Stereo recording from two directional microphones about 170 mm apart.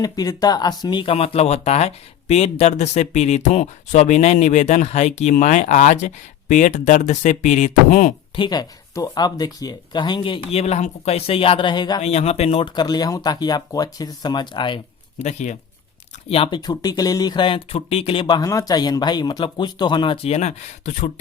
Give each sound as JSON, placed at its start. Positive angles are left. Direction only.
{"t": 0.0, "sound": "speech", "side_deg": 20}
{"t": 8.4, "sound": "speech", "side_deg": 25}
{"t": 12.0, "sound": "speech", "side_deg": 35}
{"t": 15.2, "sound": "speech", "side_deg": 45}
{"t": 16.3, "sound": "speech", "side_deg": 30}